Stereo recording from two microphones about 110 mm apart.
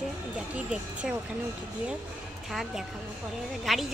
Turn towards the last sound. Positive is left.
turn(degrees=0)  # may be behind; listen again after turning